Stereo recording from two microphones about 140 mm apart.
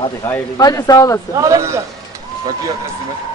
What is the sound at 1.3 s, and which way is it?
Speech, 25° right (ahead or behind).